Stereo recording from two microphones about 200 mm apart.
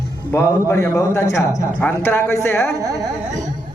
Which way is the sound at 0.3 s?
15° left (ahead or behind).